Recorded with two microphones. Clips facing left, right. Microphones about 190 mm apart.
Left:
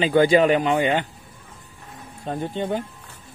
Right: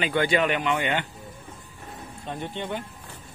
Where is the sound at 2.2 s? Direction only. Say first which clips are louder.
Left 6 dB; 40° left (ahead or behind).